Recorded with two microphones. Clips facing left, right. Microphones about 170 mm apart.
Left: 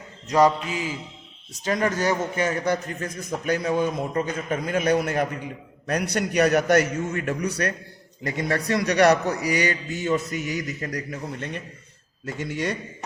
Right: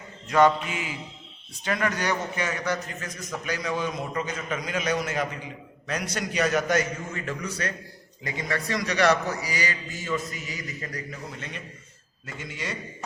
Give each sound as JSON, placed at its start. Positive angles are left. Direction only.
{"t": 0.3, "sound": "a man's voice", "side_deg": 35}
{"t": 2.6, "sound": "a man's voice", "side_deg": 55}
{"t": 8.2, "sound": "speech", "side_deg": 45}
{"t": 8.7, "sound": "a man's voice", "side_deg": 60}
{"t": 11.1, "sound": "a man's voice", "side_deg": 55}
{"t": 12.2, "sound": "a man's voice", "side_deg": 65}